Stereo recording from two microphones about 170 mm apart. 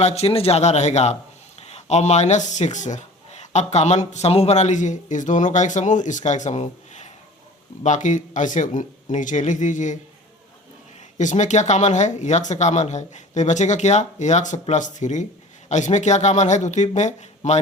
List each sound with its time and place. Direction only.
0.0 s speech: 40° left (ahead or behind)
11.2 s speech: 45° left (ahead or behind)